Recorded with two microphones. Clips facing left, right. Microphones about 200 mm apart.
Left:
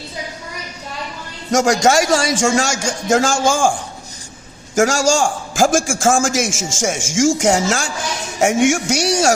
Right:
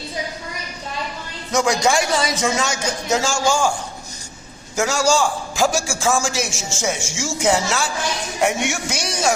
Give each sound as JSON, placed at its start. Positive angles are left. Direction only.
{"t": 1.6, "sound": "a man's voice", "side_deg": 45}
{"t": 4.8, "sound": "a man's voice", "side_deg": 45}